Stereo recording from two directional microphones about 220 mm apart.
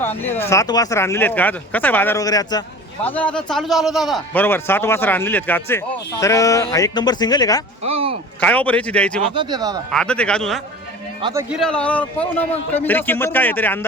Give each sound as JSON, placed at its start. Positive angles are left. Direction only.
{"t": 0.0, "sound": "a man's voice", "side_deg": 10}
{"t": 3.0, "sound": "a man's voice", "side_deg": 5}
{"t": 7.9, "sound": "a sound", "side_deg": -25}
{"t": 8.4, "sound": "speech", "side_deg": 5}
{"t": 9.2, "sound": "speech", "side_deg": -20}
{"t": 9.9, "sound": "a man's voice", "side_deg": 5}